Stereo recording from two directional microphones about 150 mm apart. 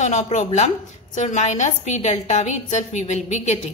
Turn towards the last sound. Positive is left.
turn(degrees=50)  # may be behind; listen again after turning